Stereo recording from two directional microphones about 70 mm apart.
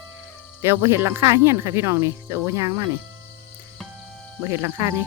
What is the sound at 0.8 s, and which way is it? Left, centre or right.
Speech, right.